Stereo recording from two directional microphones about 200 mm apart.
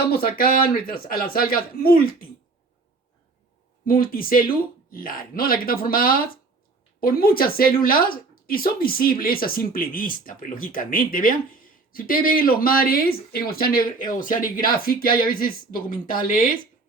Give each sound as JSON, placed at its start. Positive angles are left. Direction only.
{"t": 0.1, "sound": "a woman's voice", "side_deg": 50}
{"t": 3.8, "sound": "a woman's voice", "side_deg": 45}